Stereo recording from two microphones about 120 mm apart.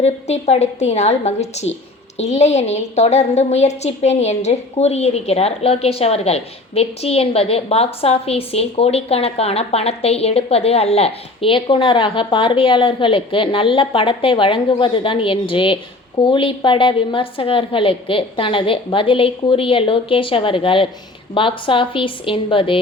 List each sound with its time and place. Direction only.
0.0 s a woman's voice: 65° left (ahead or behind); by 22.8 s 45° left (ahead or behind)